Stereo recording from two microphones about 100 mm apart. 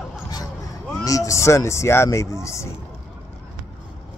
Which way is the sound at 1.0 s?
35° left (ahead or behind).